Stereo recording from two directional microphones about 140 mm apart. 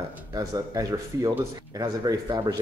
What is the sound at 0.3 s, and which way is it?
Speech, 25° right (ahead or behind).